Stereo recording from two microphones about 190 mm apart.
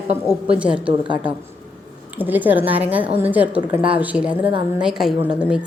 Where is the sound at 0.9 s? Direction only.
25° right (ahead or behind).